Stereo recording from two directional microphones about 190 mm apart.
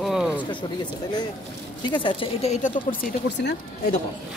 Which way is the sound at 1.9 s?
25° left (ahead or behind).